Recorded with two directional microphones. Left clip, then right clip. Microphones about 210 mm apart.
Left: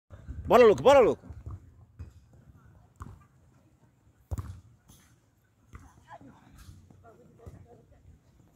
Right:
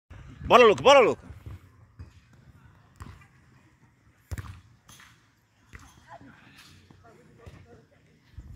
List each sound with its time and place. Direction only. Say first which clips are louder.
0.5 s speech: right 2 dB; 10° left (ahead or behind)
4.3 s basketball bounce: right 1 dB; 35° left (ahead or behind)